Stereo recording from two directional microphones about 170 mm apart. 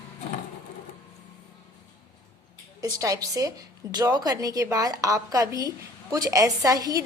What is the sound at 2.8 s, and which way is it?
A woman's voice, 20° right (ahead or behind).